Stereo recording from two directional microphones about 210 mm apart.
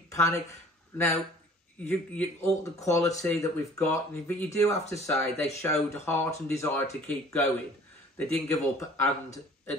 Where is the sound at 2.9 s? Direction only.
15° left (ahead or behind).